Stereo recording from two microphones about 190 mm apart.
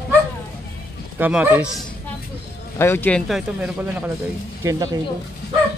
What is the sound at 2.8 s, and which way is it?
Speech, 10° left (ahead or behind).